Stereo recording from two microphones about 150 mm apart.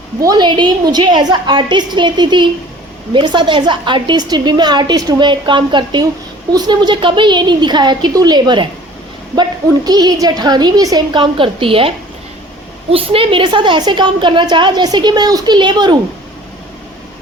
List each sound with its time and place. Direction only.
0.2 s a woman's voice: 25° right (ahead or behind)